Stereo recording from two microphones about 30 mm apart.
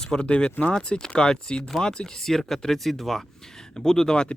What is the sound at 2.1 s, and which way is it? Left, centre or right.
Speech, centre.